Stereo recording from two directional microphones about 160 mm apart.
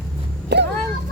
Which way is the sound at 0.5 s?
90° right.